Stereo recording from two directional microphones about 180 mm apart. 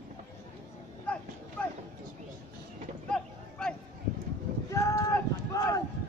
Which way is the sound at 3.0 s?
5° left (ahead or behind).